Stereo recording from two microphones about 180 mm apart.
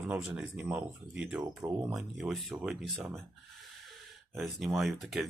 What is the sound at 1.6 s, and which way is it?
Speech, 20° right (ahead or behind).